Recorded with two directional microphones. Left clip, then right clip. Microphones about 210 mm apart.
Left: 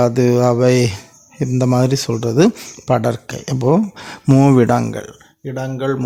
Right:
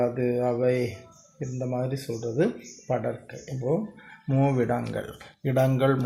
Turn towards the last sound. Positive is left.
turn(degrees=15)  # may be behind; listen again after turning